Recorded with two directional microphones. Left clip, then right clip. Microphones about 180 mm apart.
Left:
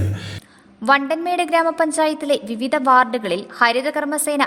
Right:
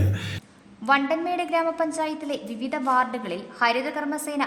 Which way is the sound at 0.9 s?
40° left (ahead or behind).